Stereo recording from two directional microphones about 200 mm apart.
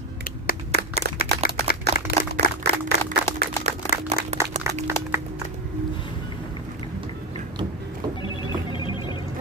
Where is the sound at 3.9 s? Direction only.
35° right (ahead or behind).